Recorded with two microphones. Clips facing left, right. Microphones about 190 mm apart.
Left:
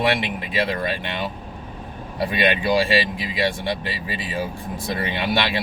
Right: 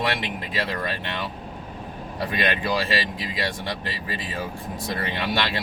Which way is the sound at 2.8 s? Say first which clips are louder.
Left 5 dB; 10° left (ahead or behind).